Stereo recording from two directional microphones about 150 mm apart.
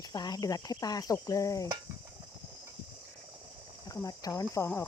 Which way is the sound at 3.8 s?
25° left (ahead or behind).